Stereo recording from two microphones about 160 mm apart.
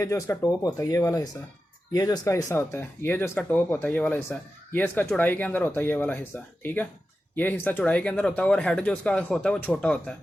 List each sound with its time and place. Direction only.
0.0 s speech: 20° left (ahead or behind)